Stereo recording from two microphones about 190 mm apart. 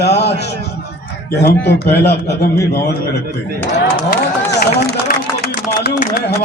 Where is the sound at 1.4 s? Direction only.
60° left (ahead or behind).